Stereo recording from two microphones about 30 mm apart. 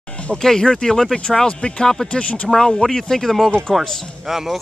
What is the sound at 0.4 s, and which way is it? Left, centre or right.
Speech, centre.